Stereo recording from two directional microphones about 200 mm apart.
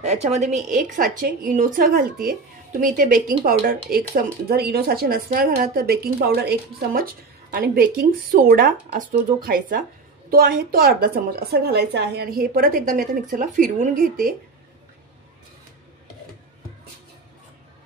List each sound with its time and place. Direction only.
0.0 s a woman's voice: 35° right (ahead or behind)